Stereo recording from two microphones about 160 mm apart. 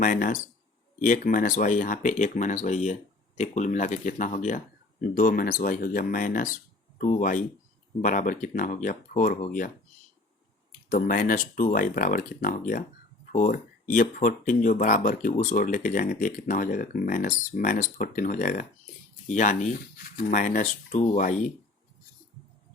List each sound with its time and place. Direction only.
0.0 s speech: 55° left (ahead or behind)